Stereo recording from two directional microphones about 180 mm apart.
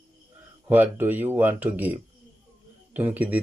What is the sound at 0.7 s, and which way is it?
Speech, 10° right (ahead or behind).